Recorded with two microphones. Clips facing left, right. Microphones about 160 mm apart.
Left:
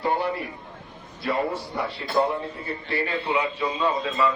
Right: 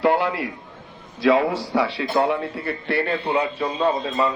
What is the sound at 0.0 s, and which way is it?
A man's voice, 90° right.